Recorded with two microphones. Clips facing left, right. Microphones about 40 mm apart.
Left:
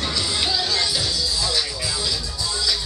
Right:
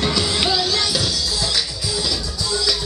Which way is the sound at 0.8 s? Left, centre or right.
Right.